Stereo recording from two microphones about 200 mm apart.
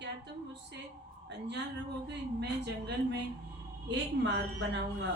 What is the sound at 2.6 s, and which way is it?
Speech, 55° right (ahead or behind).